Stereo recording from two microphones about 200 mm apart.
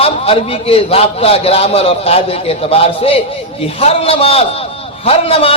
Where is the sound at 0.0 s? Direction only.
30° left (ahead or behind).